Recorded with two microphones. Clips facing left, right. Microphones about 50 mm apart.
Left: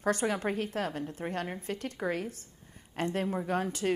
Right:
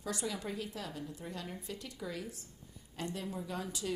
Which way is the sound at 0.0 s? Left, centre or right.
Left.